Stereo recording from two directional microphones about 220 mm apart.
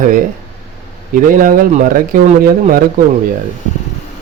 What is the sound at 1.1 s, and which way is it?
Speech, 40° right (ahead or behind).